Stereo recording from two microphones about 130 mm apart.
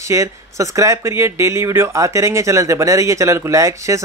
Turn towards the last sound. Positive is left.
turn(degrees=-25)  # may be behind; listen again after turning